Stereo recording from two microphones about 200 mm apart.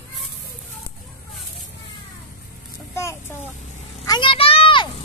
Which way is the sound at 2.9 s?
15° left (ahead or behind).